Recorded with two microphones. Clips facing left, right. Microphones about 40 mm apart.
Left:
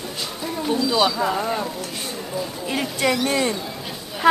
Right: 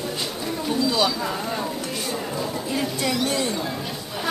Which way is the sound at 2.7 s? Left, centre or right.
Left.